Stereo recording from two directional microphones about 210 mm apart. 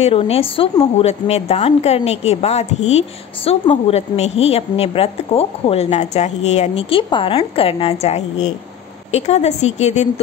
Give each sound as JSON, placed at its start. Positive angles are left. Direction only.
{"t": 0.0, "sound": "a woman's voice", "side_deg": 30}